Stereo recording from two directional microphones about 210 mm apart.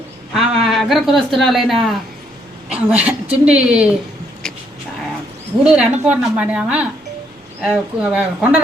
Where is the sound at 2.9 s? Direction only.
5° right (ahead or behind).